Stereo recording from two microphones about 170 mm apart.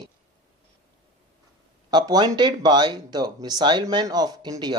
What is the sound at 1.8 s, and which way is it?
Speech, 25° right (ahead or behind).